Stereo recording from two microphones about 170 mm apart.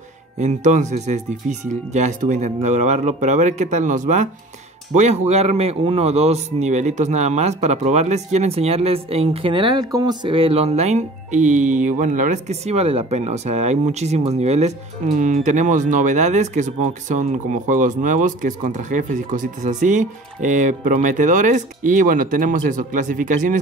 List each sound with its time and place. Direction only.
0.4 s a man's voice: 45° right (ahead or behind)